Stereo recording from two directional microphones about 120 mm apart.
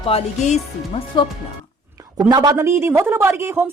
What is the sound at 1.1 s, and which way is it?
Speech, 40° left (ahead or behind).